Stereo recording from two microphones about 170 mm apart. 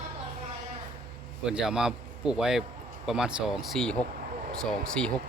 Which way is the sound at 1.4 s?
5° right (ahead or behind).